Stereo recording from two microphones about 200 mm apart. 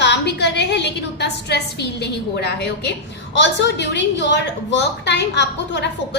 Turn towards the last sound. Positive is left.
turn(degrees=60)  # may be behind; listen again after turning